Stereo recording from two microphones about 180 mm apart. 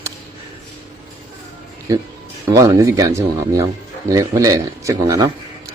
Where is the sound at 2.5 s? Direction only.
20° right (ahead or behind).